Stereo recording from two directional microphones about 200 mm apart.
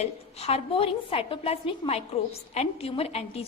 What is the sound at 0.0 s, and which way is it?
A woman's voice, 30° left (ahead or behind).